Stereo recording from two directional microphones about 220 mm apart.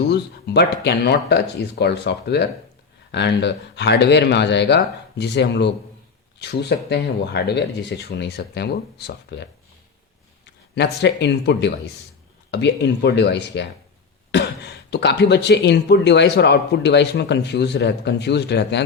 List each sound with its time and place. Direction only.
0.1 s speech: 50° left (ahead or behind)
10.8 s speech: 50° left (ahead or behind)